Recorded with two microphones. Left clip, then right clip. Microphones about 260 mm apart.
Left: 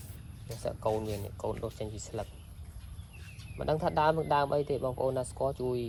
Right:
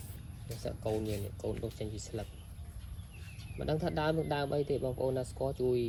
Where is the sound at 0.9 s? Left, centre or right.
Left.